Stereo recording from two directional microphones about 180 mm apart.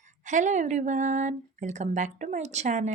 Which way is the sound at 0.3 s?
45° right (ahead or behind).